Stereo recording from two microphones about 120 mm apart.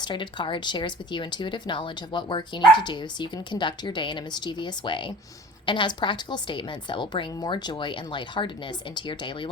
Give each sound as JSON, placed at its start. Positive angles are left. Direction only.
{"t": 0.0, "sound": "speech", "side_deg": 40}